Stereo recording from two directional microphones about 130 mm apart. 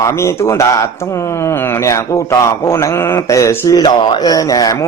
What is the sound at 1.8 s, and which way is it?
Speech, 20° left (ahead or behind).